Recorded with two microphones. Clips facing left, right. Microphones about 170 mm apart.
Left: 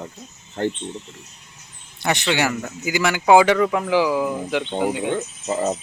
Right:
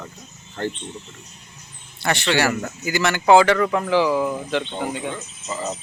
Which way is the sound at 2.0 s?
15° left (ahead or behind).